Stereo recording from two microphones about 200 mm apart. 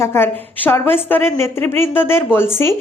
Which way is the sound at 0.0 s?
10° left (ahead or behind).